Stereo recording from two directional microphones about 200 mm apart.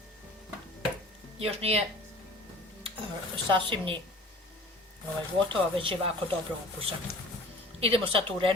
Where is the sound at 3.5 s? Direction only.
25° right (ahead or behind).